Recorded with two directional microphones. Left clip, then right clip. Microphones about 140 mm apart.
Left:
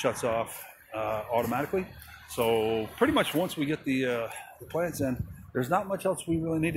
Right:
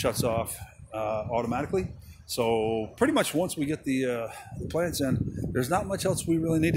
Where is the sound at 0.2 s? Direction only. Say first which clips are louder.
Even; 45° right (ahead or behind).